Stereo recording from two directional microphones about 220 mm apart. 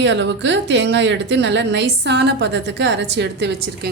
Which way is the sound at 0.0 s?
55° right (ahead or behind).